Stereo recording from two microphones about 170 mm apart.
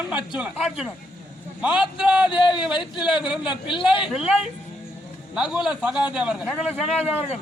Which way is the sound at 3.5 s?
30° left (ahead or behind).